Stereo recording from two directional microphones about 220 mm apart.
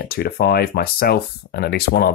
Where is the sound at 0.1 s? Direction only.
45° left (ahead or behind).